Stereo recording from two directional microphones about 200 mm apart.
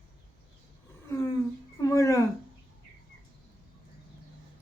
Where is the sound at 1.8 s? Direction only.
15° left (ahead or behind).